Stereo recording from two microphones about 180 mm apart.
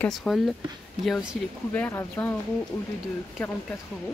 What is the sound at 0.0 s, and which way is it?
Speech, centre (ahead or behind).